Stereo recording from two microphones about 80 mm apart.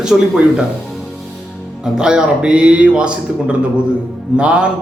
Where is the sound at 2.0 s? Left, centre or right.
Centre.